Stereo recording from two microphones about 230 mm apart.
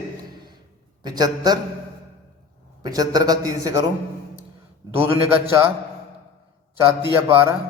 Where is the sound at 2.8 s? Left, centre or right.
Centre.